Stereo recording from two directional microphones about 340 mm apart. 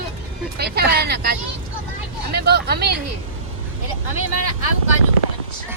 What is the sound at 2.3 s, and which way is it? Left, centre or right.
Speech, right.